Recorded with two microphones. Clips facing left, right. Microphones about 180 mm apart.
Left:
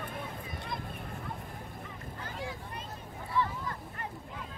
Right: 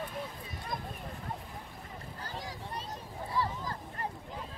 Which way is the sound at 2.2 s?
35° right (ahead or behind).